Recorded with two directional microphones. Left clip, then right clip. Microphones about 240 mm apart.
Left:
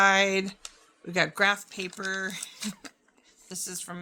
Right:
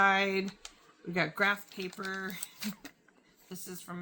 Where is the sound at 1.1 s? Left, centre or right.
Left.